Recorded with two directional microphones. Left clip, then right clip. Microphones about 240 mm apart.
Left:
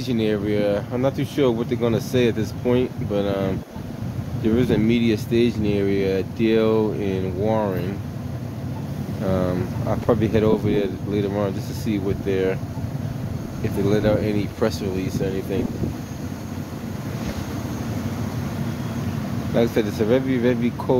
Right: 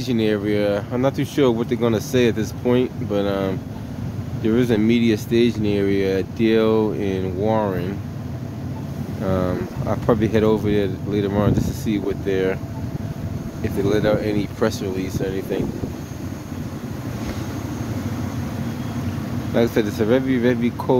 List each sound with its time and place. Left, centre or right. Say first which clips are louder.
0.1 s speech: right 2 dB; centre
9.2 s speech: right 1 dB; centre
13.8 s speech: right 1 dB; centre
19.5 s speech: right 1 dB; centre